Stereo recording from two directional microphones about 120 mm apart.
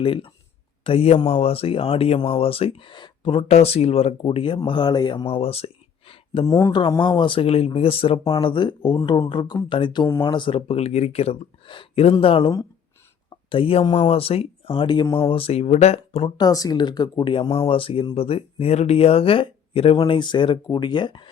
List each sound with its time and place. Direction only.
0.0 s speech: 50° left (ahead or behind)
3.5 s speech: 60° left (ahead or behind)
4.2 s speech: 45° left (ahead or behind)
6.4 s speech: 25° left (ahead or behind)
7.0 s speech: 40° left (ahead or behind); by 16.3 s 55° left (ahead or behind)
16.4 s speech: 30° left (ahead or behind)